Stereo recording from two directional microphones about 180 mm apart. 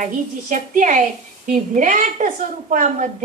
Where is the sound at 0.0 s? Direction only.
45° right (ahead or behind).